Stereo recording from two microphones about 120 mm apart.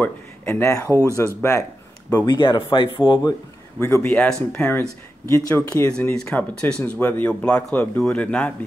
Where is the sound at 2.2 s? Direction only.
40° left (ahead or behind).